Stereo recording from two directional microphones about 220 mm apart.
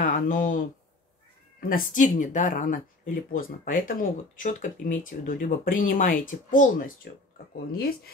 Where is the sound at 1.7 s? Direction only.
40° left (ahead or behind).